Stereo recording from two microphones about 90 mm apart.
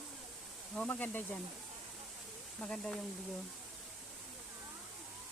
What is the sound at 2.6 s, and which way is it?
Speech, 5° left (ahead or behind).